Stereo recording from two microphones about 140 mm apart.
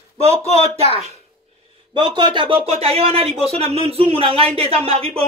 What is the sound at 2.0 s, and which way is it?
Speech, 30° right (ahead or behind).